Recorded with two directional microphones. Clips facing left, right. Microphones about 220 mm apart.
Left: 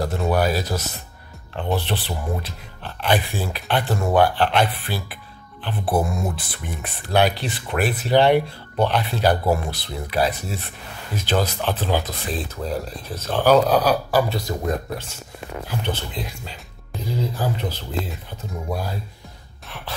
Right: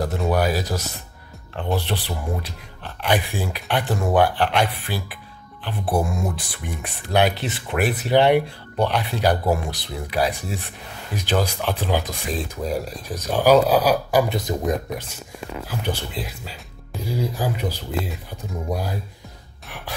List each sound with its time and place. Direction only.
0.3 s speech: 15° right (ahead or behind)